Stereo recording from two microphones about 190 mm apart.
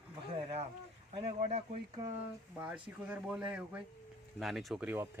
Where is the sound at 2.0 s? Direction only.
15° right (ahead or behind).